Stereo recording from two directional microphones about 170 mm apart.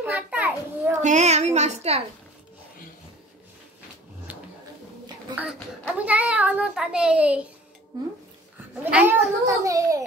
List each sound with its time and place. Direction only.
0.0 s children playing: 10° right (ahead or behind)
1.0 s a woman's voice: 45° right (ahead or behind)
5.3 s a child's voice: 10° right (ahead or behind)
8.9 s a child's voice: 10° right (ahead or behind)